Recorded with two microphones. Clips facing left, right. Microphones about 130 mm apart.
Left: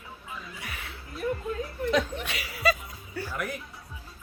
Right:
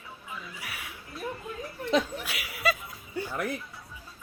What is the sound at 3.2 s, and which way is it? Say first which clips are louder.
Music: right 2 dB; 20° right (ahead or behind).